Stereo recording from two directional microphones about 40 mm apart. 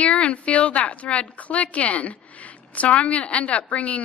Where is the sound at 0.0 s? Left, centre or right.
Left.